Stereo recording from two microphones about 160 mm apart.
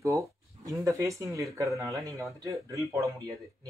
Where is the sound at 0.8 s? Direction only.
20° right (ahead or behind).